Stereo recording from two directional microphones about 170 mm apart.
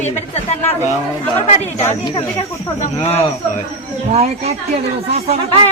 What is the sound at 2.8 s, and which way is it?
Speech, 40° left (ahead or behind).